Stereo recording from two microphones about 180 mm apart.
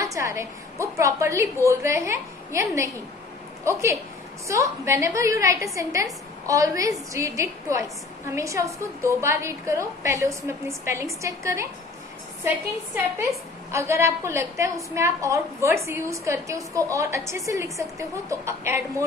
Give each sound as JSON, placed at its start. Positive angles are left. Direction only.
{"t": 0.0, "sound": "a woman's voice", "side_deg": -15}
{"t": 13.7, "sound": "a woman's voice", "side_deg": -15}